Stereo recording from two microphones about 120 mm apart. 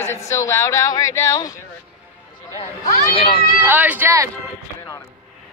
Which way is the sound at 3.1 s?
50° left (ahead or behind).